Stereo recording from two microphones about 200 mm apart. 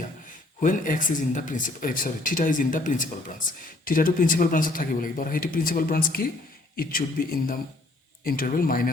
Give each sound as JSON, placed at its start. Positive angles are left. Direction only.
{"t": 0.6, "sound": "speech", "side_deg": 40}